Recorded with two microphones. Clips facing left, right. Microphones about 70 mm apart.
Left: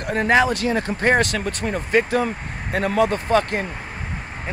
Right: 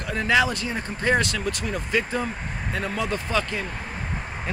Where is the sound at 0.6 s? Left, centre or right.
Left.